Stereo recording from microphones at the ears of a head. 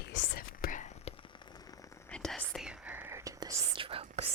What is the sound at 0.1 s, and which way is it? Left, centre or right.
Whispering, left.